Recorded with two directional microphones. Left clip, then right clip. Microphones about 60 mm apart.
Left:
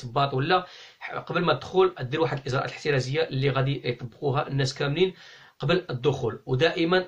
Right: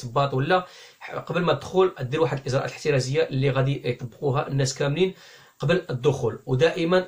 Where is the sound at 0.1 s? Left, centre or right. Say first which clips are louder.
Right 1 dB; right.